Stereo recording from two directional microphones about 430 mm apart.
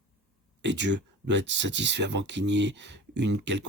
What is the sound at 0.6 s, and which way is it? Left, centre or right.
Speech, right.